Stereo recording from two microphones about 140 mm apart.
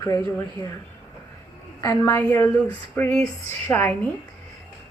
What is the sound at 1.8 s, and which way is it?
Speech, 25° left (ahead or behind).